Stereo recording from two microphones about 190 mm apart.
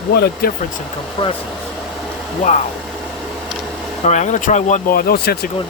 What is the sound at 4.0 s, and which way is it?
Speech, 35° left (ahead or behind).